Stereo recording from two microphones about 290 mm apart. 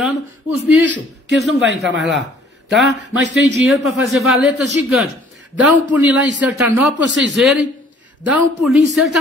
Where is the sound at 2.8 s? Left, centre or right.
Left.